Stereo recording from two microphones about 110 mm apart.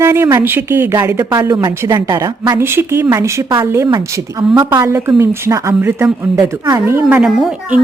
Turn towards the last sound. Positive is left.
turn(degrees=-5)  # may be behind; listen again after turning